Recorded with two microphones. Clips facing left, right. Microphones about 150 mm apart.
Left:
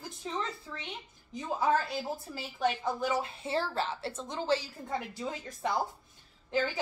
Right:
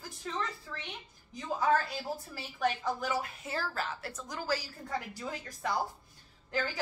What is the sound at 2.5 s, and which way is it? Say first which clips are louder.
A woman's voice: left 1 dB; 25° left (ahead or behind).